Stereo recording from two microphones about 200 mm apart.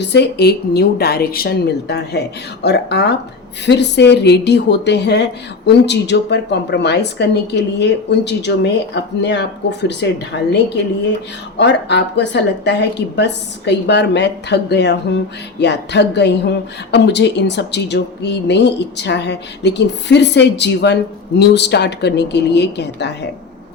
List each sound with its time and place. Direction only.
0.0 s a woman's voice: 60° left (ahead or behind)
11.5 s a woman's voice: 60° left (ahead or behind)